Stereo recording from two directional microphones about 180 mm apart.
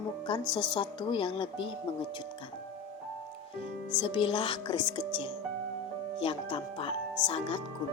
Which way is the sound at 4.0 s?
30° left (ahead or behind).